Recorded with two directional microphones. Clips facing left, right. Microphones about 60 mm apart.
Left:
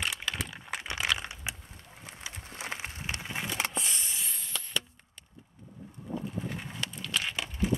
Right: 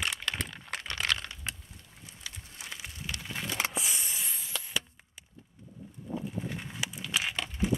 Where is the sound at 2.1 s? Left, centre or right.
Left.